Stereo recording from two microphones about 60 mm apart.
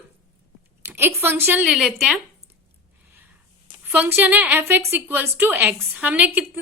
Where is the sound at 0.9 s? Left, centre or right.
Right.